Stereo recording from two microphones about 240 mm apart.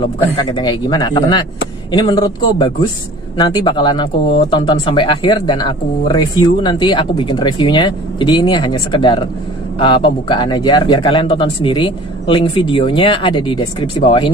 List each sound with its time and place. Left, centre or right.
0.0 s a man's voice: centre